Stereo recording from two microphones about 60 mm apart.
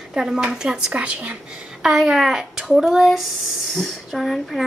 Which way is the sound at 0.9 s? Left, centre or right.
Right.